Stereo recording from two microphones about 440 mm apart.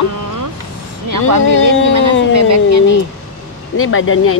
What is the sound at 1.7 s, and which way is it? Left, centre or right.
Speech, left.